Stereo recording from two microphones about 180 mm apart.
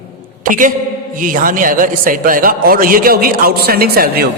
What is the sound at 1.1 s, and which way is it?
A man's voice, 50° right (ahead or behind).